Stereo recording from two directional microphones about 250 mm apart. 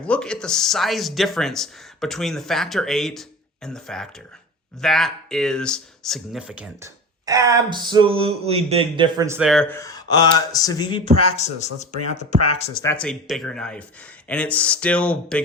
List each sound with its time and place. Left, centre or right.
0.0 s speech: centre
9.5 s speech: centre; by 12.7 s left
12.8 s speech: centre